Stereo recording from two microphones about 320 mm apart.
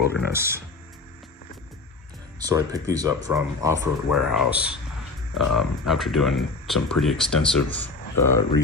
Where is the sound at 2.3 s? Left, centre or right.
Centre.